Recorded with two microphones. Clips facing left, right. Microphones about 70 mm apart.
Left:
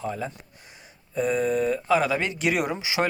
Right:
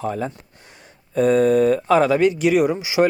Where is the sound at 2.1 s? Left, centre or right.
Centre.